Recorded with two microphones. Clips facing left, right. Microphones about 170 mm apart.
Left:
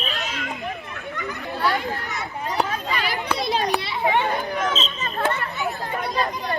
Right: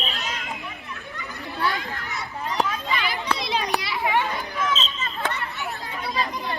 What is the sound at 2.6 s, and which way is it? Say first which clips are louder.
Children playing: left 1 dB; 40° left (ahead or behind).